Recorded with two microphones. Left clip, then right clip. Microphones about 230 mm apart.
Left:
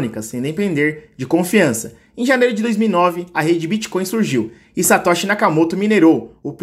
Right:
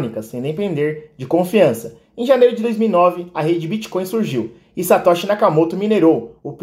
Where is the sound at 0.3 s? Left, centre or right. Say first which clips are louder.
Left 2 dB; left.